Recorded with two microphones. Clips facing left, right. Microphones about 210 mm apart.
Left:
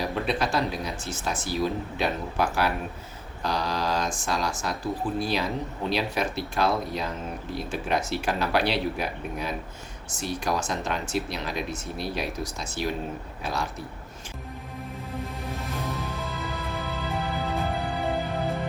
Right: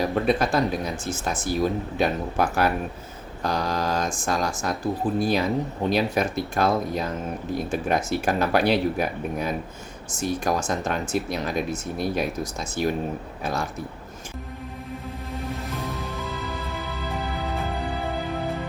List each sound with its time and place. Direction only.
0.1 s speech: 50° right (ahead or behind)
15.9 s music: centre (ahead or behind)